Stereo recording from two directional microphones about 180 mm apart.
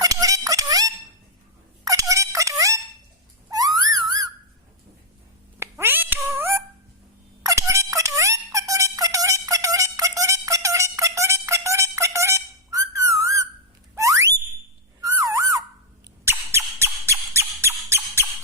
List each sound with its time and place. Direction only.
0.0 s music: 20° right (ahead or behind)
1.8 s a sound: 20° right (ahead or behind)
5.5 s cat: 15° right (ahead or behind)
7.4 s music: 15° right (ahead or behind)
13.9 s a sound: 15° right (ahead or behind)
15.0 s bird: 15° right (ahead or behind)
16.2 s squeak: 15° right (ahead or behind)